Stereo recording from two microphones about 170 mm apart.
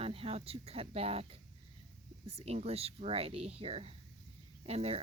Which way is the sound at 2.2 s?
40° right (ahead or behind).